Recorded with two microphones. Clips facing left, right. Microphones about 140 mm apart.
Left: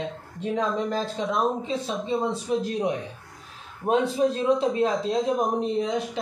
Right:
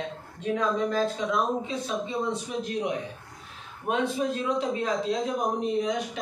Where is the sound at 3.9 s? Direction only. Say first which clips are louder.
Left 5 dB; 30° left (ahead or behind).